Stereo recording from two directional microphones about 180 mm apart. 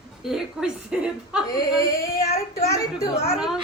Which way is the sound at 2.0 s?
55° left (ahead or behind).